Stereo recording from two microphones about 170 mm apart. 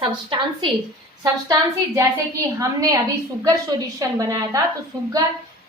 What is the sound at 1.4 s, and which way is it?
A woman's voice, 20° right (ahead or behind).